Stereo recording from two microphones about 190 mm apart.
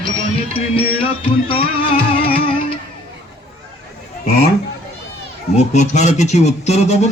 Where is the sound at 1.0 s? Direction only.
30° left (ahead or behind).